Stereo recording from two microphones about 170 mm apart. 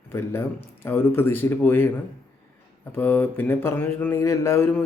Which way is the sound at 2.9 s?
10° left (ahead or behind).